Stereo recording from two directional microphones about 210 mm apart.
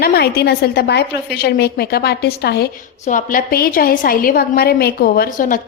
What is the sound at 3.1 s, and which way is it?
A woman's voice, 40° left (ahead or behind).